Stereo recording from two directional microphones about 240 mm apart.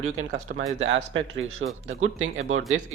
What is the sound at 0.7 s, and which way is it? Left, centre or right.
Speech, right.